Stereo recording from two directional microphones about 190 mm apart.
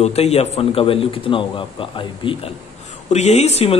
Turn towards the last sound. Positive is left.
turn(degrees=35)  # may be behind; listen again after turning